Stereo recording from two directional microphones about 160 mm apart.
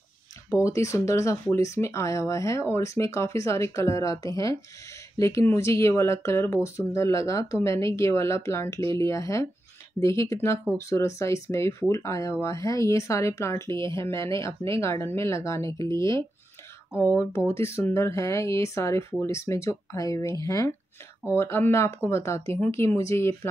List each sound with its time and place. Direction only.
0.7 s speech: 20° left (ahead or behind)